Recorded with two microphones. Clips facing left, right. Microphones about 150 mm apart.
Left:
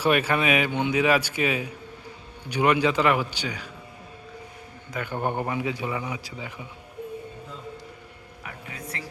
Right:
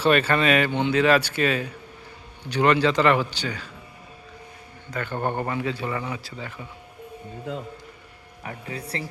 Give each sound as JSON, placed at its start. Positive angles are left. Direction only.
{"t": 0.0, "sound": "speech", "side_deg": 10}
{"t": 4.9, "sound": "speech", "side_deg": 10}
{"t": 8.4, "sound": "a woman's voice", "side_deg": -35}